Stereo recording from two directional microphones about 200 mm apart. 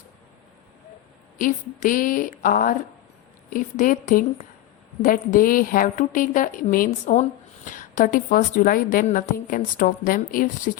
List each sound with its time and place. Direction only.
1.4 s a woman's voice: 40° left (ahead or behind)